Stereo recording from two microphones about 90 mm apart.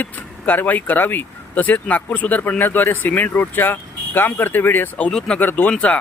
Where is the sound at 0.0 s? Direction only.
20° left (ahead or behind).